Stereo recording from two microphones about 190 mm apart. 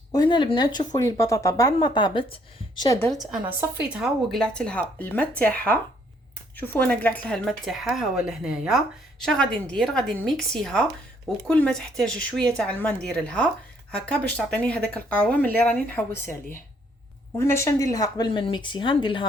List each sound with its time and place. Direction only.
0.1 s speech: 25° left (ahead or behind)
3.9 s a woman's voice: centre (ahead or behind)
17.3 s speech: 15° left (ahead or behind)